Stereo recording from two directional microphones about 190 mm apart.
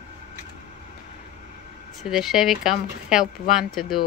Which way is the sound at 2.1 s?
Centre (ahead or behind).